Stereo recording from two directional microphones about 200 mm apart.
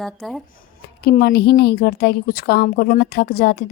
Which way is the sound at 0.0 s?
Centre (ahead or behind).